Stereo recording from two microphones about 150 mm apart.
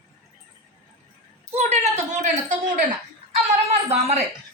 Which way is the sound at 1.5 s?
45° right (ahead or behind).